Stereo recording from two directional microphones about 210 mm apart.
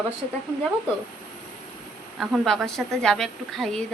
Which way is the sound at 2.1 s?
Centre (ahead or behind).